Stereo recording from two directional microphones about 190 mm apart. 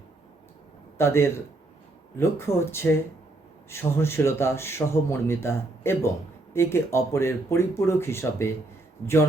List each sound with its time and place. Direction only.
0.9 s a man's voice: 15° left (ahead or behind)
9.0 s speech: 30° left (ahead or behind)